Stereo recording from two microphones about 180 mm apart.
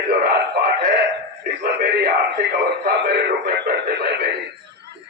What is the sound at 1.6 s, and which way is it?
A man's voice, 65° right (ahead or behind).